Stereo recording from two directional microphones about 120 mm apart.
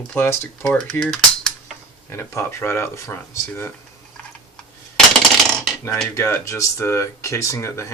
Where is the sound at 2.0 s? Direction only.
20° left (ahead or behind).